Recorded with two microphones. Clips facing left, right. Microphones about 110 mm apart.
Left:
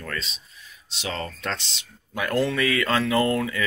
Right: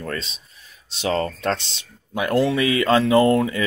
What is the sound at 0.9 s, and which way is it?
Speech, 40° right (ahead or behind).